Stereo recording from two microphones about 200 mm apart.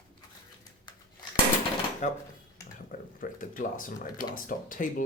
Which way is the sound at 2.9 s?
45° left (ahead or behind).